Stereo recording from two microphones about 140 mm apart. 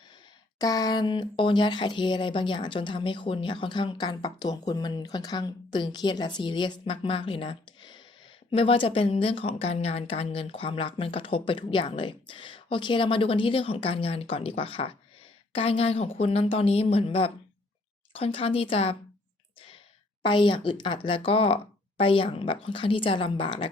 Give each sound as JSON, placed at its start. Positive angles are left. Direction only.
{"t": 0.6, "sound": "a woman's voice", "side_deg": 25}
{"t": 20.2, "sound": "speech", "side_deg": 35}